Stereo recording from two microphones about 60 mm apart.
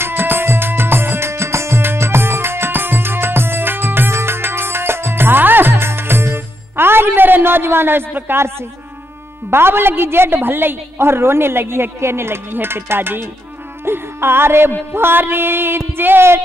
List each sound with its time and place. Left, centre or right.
0.0 s music: right
9.5 s a woman's voice: right